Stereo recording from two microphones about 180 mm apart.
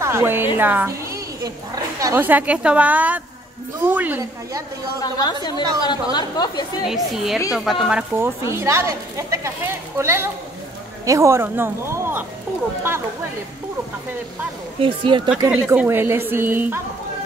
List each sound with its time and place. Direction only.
0.0 s a woman's voice: 15° right (ahead or behind)
0.6 s bleat: 10° right (ahead or behind)
2.0 s speech: 15° right (ahead or behind)
5.0 s a woman's voice: 20° left (ahead or behind)
6.9 s speech: centre (ahead or behind)
8.2 s speech: 15° right (ahead or behind)
14.8 s speech: 25° right (ahead or behind)
15.4 s speech: 10° right (ahead or behind)